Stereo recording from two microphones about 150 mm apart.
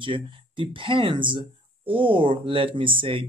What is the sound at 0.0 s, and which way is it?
Speech, 35° right (ahead or behind).